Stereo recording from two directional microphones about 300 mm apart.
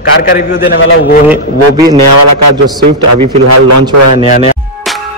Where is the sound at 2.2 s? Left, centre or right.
Right.